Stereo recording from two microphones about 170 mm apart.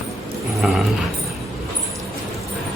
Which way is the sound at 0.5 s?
Centre (ahead or behind).